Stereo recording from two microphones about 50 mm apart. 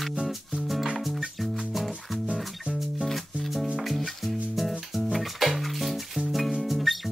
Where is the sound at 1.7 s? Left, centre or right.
Centre.